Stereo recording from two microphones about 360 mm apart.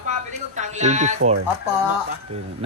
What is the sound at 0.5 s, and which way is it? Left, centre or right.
Speech, centre.